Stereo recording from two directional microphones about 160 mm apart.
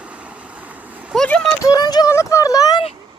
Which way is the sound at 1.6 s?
25° left (ahead or behind).